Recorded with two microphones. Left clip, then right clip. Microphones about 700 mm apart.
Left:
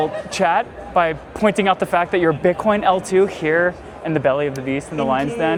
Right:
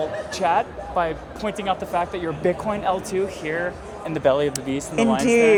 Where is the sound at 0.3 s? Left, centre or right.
Left.